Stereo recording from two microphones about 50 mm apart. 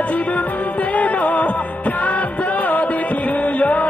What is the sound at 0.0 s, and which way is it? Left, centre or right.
Music, left.